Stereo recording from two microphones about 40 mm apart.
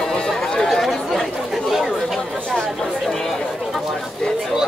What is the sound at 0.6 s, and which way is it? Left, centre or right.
Chatter, centre.